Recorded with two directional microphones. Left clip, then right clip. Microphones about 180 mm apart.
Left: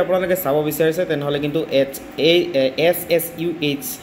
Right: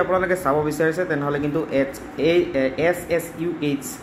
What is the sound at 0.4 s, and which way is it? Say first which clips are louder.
Speech: left 2 dB; 20° left (ahead or behind).